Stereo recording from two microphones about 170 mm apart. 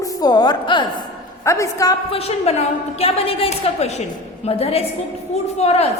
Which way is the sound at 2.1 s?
35° left (ahead or behind).